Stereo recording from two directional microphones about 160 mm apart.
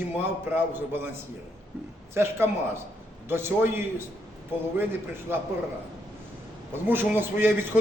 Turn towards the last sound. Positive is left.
turn(degrees=-10)  # may be behind; listen again after turning